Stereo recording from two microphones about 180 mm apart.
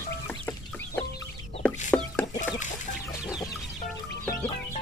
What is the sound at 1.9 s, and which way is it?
Chicken, 5° left (ahead or behind).